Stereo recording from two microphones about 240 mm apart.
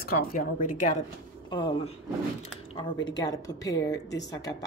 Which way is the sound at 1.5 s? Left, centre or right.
Centre.